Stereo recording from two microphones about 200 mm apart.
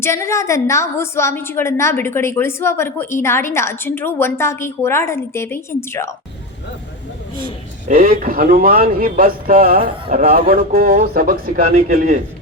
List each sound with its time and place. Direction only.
0.0 s a woman's voice: 15° left (ahead or behind)
7.9 s speech: 45° right (ahead or behind)